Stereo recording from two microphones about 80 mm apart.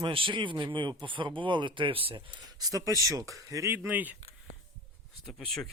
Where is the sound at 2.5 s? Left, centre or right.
Right.